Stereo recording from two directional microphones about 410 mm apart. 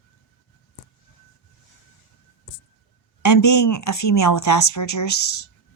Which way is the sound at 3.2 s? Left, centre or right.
Left.